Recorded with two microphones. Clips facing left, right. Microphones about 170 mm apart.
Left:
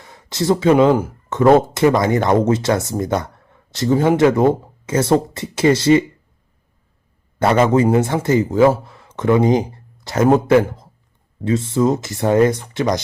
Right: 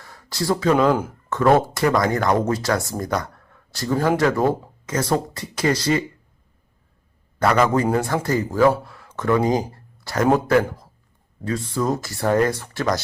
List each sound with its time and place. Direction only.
0.0 s a sound: 20° left (ahead or behind)
1.3 s speech: 20° left (ahead or behind)
7.3 s speech: 25° left (ahead or behind)